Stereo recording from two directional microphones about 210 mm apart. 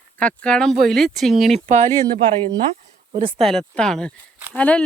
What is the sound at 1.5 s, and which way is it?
Speech, 35° right (ahead or behind).